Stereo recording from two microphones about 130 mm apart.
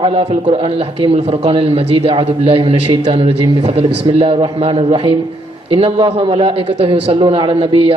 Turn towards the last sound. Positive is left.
turn(degrees=-45)  # may be behind; listen again after turning